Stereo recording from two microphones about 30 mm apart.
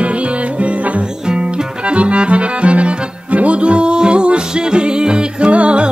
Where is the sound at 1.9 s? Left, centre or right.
Right.